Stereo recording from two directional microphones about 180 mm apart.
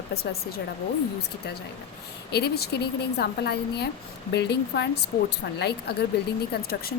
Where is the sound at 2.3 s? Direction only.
65° left (ahead or behind).